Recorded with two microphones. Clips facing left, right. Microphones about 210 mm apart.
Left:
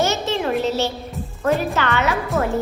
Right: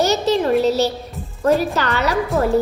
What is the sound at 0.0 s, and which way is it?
Music, 35° right (ahead or behind).